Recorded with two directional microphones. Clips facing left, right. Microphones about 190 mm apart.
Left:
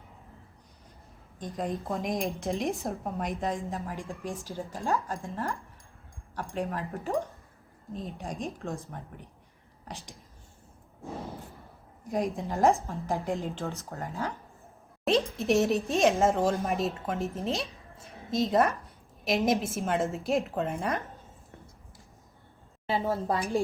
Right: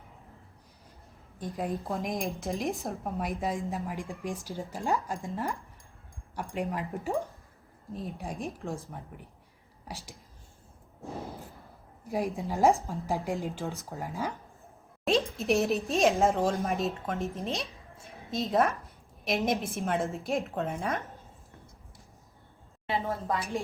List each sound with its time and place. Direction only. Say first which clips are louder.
1.4 s speech: even; 10° right (ahead or behind)
3.7 s speech: right 1 dB; 15° right (ahead or behind)
6.9 s speech: left 1 dB; centre (ahead or behind)
9.9 s speech: even; 10° right (ahead or behind)
12.1 s speech: left 1 dB; centre (ahead or behind)
12.5 s speech: right 1 dB; 10° right (ahead or behind)
15.0 s speech: left 1 dB; centre (ahead or behind)
22.9 s a woman's voice: left 3 dB; 30° left (ahead or behind)